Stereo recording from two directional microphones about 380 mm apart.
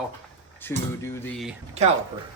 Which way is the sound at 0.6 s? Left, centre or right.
Centre.